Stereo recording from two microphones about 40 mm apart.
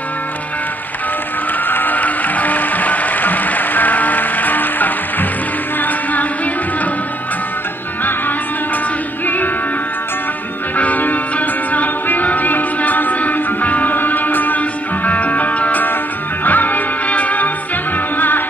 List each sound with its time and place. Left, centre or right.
1.6 s music: left
9.2 s music: left
10.8 s music: left
17.9 s music: left